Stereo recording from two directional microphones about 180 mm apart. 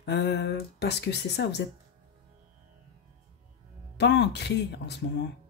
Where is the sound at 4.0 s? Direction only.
70° left (ahead or behind).